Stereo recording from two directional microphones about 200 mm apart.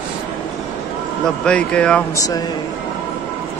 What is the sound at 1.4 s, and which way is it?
Speech, 5° left (ahead or behind).